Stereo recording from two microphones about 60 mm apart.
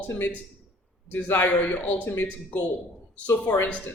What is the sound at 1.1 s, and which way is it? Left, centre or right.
Speech, left.